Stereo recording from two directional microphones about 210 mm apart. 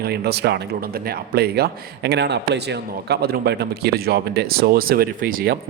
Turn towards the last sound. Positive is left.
turn(degrees=-45)  # may be behind; listen again after turning